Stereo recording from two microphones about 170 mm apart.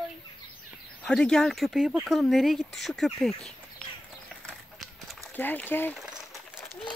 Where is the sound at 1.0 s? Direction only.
5° left (ahead or behind).